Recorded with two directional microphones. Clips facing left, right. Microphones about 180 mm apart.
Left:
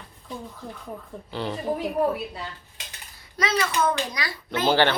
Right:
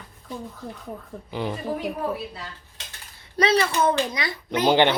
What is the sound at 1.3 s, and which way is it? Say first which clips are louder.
Speech: right 1 dB; 15° right (ahead or behind).